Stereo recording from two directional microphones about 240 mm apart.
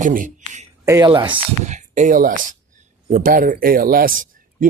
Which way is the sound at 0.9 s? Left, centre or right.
Centre.